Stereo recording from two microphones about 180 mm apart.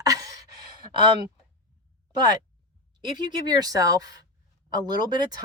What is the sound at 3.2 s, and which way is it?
Speech, 25° right (ahead or behind).